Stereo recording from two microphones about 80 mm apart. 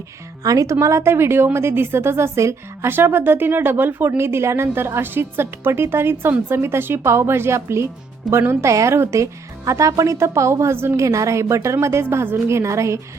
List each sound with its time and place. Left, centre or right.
0.4 s a woman's voice: right
2.9 s a woman's voice: right